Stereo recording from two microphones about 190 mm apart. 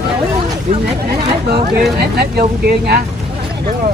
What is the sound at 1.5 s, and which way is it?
Speech, 55° right (ahead or behind).